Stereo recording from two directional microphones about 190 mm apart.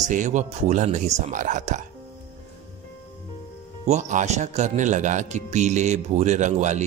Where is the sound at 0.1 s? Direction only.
40° right (ahead or behind).